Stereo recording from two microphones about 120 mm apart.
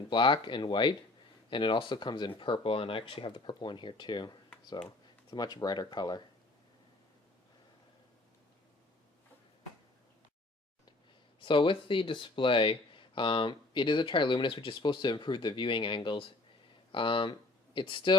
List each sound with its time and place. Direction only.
0.1 s speech: 45° left (ahead or behind)
11.3 s speech: 45° left (ahead or behind)